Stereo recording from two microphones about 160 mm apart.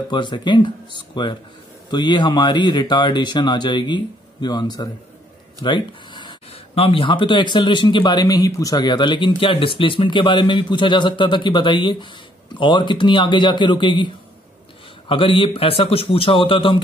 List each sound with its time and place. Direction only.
0.1 s a man's voice: 30° left (ahead or behind)